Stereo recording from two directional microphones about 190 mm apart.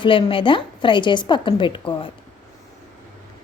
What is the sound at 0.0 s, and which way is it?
A woman's voice, 25° left (ahead or behind).